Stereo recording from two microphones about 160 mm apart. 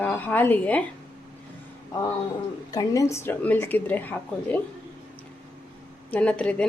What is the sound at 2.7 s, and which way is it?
Speech, 20° left (ahead or behind).